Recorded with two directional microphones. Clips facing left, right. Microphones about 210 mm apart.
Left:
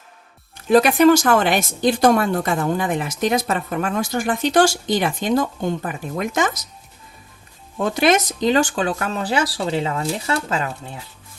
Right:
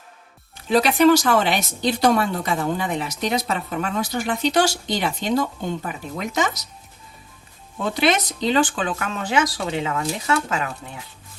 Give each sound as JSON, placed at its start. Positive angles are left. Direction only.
{"t": 0.5, "sound": "speech", "side_deg": 50}
{"t": 7.8, "sound": "speech", "side_deg": 45}